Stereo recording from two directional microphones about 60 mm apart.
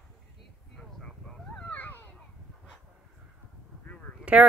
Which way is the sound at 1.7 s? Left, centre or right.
Left.